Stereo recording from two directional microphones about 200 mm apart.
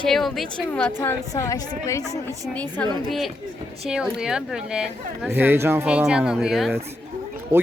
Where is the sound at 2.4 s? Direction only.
5° left (ahead or behind).